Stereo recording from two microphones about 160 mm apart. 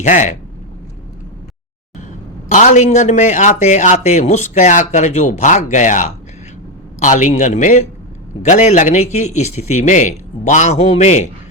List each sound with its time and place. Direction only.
0.0 s a man's voice: 50° left (ahead or behind)
2.5 s a man's voice: 50° left (ahead or behind)